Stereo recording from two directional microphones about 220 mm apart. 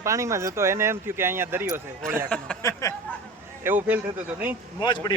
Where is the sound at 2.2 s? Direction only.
5° left (ahead or behind).